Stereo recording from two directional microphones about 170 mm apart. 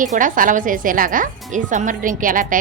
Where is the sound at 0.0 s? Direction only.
50° right (ahead or behind).